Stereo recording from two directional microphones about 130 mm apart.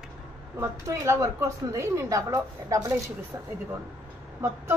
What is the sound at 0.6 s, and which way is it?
A woman's voice, 20° right (ahead or behind).